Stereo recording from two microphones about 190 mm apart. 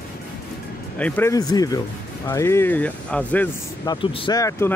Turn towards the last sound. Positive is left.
turn(degrees=15)  # may be behind; listen again after turning